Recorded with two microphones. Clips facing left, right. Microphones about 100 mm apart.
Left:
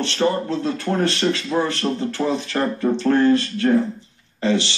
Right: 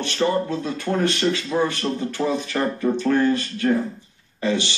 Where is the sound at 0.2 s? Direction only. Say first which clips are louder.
Left 1 dB; 30° left (ahead or behind).